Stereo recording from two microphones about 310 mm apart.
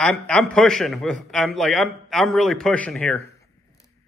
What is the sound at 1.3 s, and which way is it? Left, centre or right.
A man's voice, centre.